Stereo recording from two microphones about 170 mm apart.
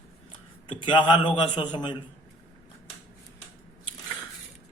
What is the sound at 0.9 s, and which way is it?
Speech, 30° left (ahead or behind).